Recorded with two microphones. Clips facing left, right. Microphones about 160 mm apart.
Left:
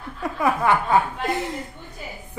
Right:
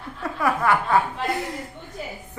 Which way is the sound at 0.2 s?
20° left (ahead or behind).